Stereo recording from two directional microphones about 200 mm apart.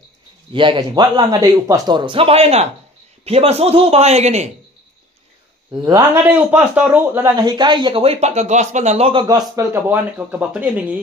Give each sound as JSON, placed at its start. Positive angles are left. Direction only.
{"t": 0.5, "sound": "a man's voice", "side_deg": -25}
{"t": 5.7, "sound": "a man's voice", "side_deg": -20}
{"t": 7.3, "sound": "a man's voice", "side_deg": -20}